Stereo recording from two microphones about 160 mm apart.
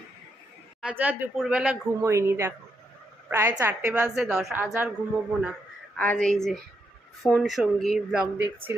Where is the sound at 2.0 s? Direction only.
15° right (ahead or behind); by 4.5 s centre (ahead or behind).